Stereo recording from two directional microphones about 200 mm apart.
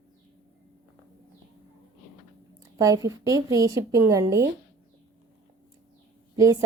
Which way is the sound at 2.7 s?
15° right (ahead or behind).